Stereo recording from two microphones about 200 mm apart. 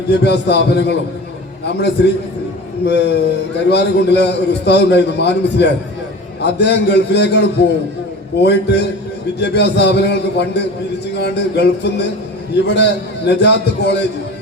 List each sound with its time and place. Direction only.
0.1 s a man's voice: 55° left (ahead or behind)
2.0 s a man's voice: 60° left (ahead or behind)